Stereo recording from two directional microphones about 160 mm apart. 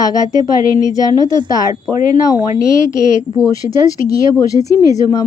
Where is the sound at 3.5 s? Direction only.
20° left (ahead or behind).